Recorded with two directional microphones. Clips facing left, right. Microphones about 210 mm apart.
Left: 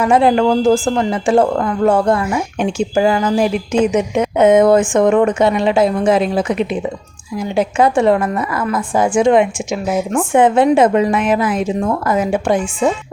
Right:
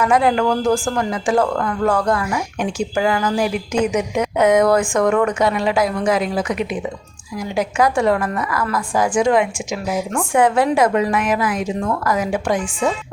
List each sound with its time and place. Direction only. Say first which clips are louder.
0.0 s speech: left 4 dB; 25° left (ahead or behind)